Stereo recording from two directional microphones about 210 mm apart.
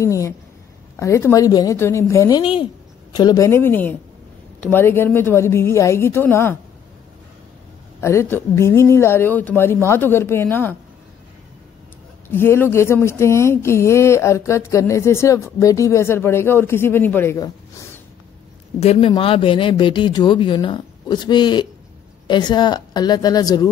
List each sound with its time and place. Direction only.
0.0 s speech: 15° left (ahead or behind)
8.0 s speech: 15° left (ahead or behind)
12.3 s speech: 10° left (ahead or behind)
18.8 s speech: 30° left (ahead or behind)